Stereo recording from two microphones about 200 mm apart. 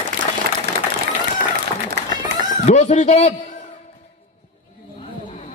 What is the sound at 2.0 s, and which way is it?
Run, 55° right (ahead or behind).